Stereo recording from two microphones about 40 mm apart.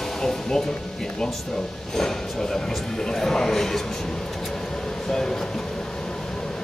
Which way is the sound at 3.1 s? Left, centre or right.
Centre.